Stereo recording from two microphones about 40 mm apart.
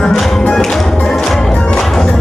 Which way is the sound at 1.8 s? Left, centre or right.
Centre.